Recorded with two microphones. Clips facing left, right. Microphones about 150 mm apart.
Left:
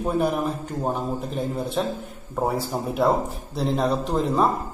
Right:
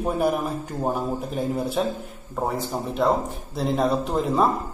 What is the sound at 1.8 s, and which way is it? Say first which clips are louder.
Speech: even; 5° right (ahead or behind).